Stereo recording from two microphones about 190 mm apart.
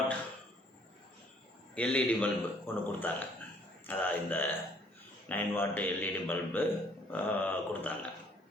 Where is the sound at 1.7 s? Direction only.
5° left (ahead or behind).